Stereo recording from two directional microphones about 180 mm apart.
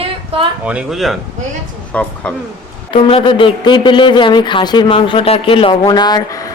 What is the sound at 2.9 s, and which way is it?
A man's voice, 30° left (ahead or behind).